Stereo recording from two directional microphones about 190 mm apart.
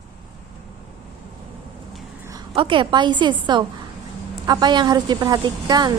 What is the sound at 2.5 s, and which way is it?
A woman's voice, 25° right (ahead or behind).